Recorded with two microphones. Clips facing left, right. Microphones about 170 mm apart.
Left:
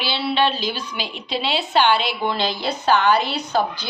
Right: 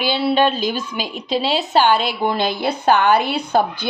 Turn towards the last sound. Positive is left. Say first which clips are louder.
# right 4 dB
turn(degrees=-55)  # may be behind; listen again after turning